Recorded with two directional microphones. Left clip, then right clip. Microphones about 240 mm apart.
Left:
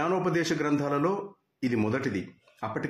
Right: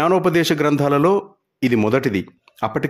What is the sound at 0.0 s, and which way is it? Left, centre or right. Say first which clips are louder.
Speech: right 11 dB; right.